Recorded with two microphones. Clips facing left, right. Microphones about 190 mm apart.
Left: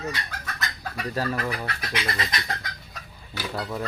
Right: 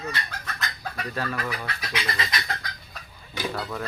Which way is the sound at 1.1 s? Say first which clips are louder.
Left 3 dB; 35° left (ahead or behind).